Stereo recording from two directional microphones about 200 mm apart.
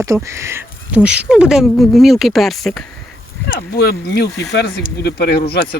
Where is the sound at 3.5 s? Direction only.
50° left (ahead or behind).